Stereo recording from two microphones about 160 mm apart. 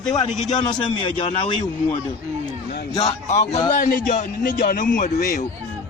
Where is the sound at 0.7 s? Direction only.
35° left (ahead or behind).